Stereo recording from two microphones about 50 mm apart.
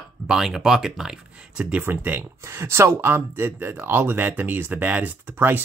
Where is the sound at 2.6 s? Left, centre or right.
Right.